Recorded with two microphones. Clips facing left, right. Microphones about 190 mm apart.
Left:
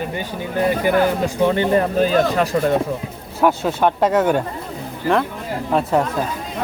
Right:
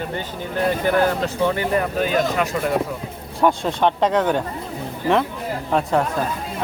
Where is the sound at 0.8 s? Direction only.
10° left (ahead or behind).